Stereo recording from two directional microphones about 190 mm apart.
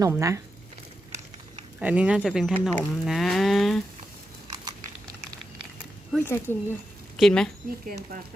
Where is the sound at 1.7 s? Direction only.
5° right (ahead or behind).